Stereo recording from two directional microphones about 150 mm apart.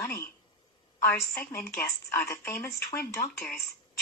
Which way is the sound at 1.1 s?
15° left (ahead or behind).